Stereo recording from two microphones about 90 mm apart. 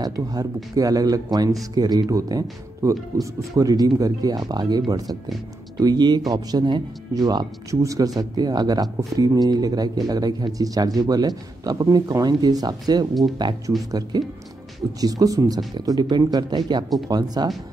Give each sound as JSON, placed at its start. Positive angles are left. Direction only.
{"t": 0.0, "sound": "speech", "side_deg": -45}